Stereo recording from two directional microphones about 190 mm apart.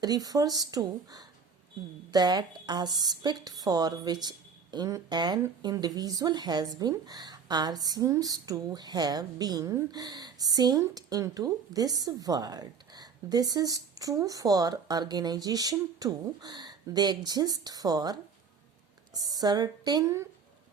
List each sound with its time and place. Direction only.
0.0 s a woman's voice: 20° right (ahead or behind)